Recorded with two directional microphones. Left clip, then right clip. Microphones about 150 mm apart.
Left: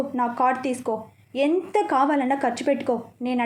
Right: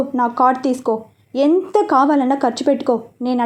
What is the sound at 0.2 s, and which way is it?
A woman's voice, 30° right (ahead or behind).